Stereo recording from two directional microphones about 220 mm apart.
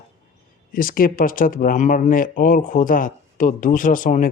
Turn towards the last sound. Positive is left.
turn(degrees=35)  # may be behind; listen again after turning